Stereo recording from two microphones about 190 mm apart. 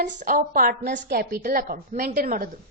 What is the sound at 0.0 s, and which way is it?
A woman's voice, 45° right (ahead or behind).